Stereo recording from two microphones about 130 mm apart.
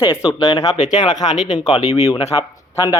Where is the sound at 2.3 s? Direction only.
25° left (ahead or behind).